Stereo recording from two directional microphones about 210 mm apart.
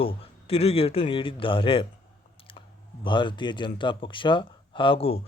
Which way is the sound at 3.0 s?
25° left (ahead or behind).